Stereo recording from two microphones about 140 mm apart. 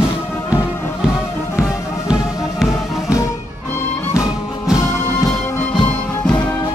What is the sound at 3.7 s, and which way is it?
Music, 20° left (ahead or behind).